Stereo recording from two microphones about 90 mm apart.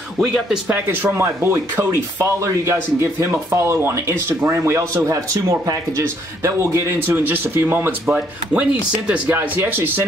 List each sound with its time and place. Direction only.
0.2 s speech: centre (ahead or behind)
0.7 s speech: 20° right (ahead or behind)